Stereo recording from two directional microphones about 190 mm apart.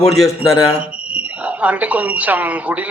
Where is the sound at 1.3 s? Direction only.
10° right (ahead or behind).